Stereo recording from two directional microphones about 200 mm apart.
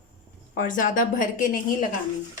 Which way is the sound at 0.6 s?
40° left (ahead or behind).